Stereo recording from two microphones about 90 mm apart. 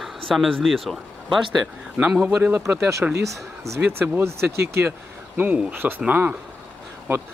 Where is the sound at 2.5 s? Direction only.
30° right (ahead or behind); by 6.3 s 15° right (ahead or behind).